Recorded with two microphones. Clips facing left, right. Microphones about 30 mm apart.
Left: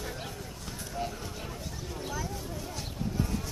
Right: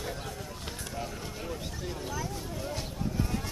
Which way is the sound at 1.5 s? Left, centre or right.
Centre.